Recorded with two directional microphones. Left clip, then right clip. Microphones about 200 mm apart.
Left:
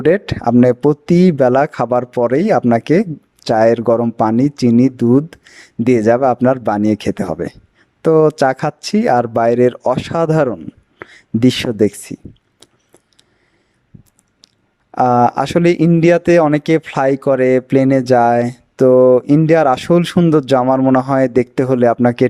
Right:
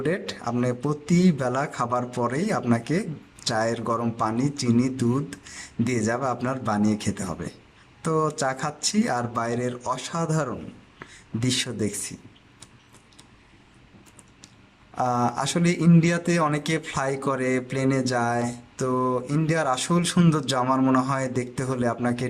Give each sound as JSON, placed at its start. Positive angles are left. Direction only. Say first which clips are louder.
{"t": 0.0, "sound": "speech", "louder": "left 14 dB", "side_deg": 40}
{"t": 14.9, "sound": "speech", "louder": "left 12 dB", "side_deg": 40}